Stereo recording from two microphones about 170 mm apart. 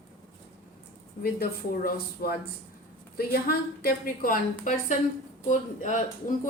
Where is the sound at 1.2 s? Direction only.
60° left (ahead or behind).